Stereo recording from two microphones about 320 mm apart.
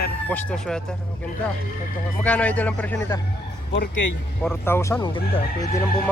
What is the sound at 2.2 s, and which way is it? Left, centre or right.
Speech, centre.